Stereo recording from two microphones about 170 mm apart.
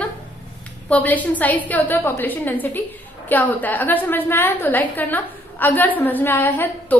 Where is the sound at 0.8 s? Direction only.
10° left (ahead or behind).